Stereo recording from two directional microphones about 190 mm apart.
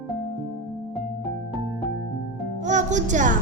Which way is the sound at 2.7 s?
40° right (ahead or behind).